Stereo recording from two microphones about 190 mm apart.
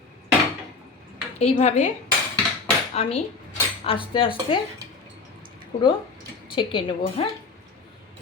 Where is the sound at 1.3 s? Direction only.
35° left (ahead or behind).